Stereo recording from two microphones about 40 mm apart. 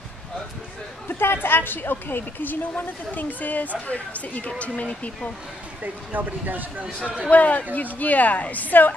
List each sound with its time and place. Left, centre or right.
1.0 s a woman's voice: left
5.8 s speech: right
7.2 s speech: left